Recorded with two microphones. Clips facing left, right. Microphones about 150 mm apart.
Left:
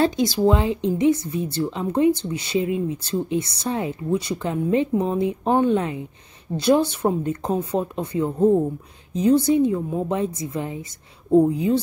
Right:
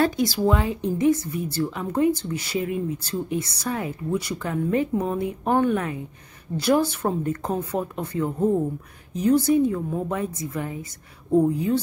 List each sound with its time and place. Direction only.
0.0 s speech: 20° left (ahead or behind)
10.0 s speech: 25° left (ahead or behind)